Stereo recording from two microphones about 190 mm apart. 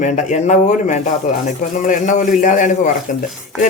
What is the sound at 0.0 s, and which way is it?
Speech, 40° left (ahead or behind).